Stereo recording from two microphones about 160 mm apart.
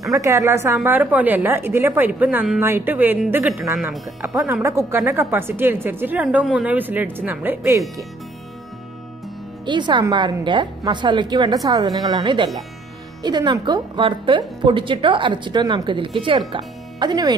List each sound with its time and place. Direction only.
0.1 s a woman's voice: 20° right (ahead or behind)
9.7 s a woman's voice: 30° right (ahead or behind)